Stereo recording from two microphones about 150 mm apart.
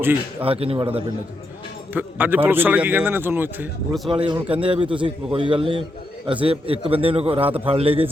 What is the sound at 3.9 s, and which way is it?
A man's voice, 35° right (ahead or behind).